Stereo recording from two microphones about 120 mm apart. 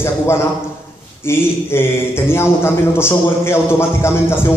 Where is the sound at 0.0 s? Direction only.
20° left (ahead or behind).